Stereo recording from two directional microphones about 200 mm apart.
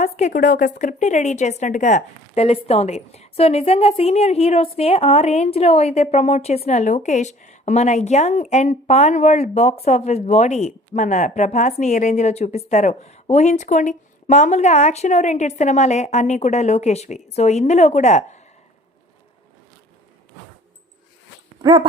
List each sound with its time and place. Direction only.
0.0 s a woman's voice: 40° left (ahead or behind)
21.6 s dog: 25° right (ahead or behind)